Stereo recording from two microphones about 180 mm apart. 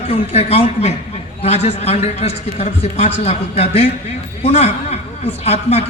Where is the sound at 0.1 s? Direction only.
35° left (ahead or behind).